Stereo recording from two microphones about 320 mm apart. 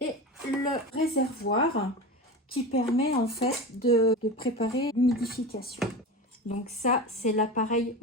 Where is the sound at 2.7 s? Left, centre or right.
Centre.